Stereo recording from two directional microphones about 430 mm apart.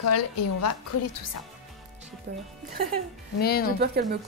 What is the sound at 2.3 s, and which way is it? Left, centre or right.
Speech, right.